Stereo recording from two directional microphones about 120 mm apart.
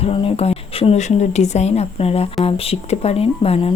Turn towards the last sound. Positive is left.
turn(degrees=55)  # may be behind; listen again after turning